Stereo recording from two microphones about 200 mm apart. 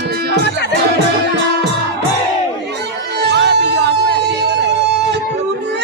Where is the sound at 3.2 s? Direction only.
60° right (ahead or behind).